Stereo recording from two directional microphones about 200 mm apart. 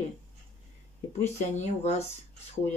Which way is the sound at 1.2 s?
35° left (ahead or behind).